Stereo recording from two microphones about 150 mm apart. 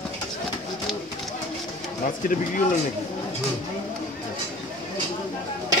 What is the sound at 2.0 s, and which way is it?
Speech, 65° left (ahead or behind).